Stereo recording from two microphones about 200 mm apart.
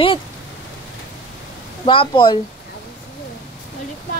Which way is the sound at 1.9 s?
25° left (ahead or behind).